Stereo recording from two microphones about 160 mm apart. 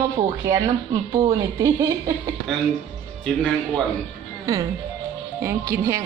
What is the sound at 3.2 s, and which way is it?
Speech, 5° left (ahead or behind).